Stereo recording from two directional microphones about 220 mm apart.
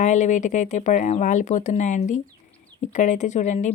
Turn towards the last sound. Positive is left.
turn(degrees=35)  # may be behind; listen again after turning